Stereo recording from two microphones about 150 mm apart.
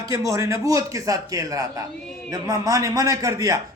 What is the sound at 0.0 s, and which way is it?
A man's voice, 20° right (ahead or behind).